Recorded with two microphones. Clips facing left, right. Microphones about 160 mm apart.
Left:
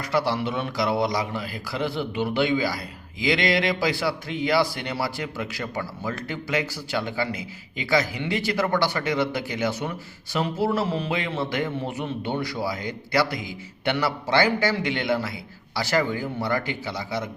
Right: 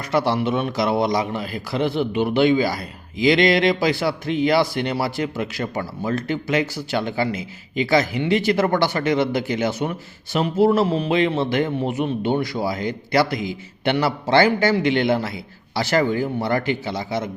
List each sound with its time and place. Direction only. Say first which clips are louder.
0.1 s a man's voice: right 5 dB; 20° right (ahead or behind)